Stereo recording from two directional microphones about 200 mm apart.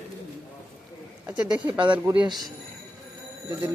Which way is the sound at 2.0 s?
10° right (ahead or behind).